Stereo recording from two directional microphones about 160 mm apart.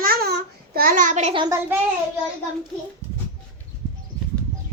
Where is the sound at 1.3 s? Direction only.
25° right (ahead or behind).